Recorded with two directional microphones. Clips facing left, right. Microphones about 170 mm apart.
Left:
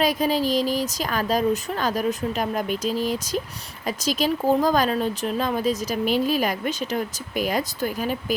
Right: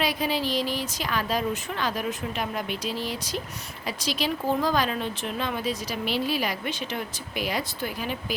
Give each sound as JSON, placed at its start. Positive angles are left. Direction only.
{"t": 0.0, "sound": "speech", "side_deg": 45}